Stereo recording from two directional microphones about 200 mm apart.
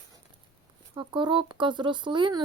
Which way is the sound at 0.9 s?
25° right (ahead or behind).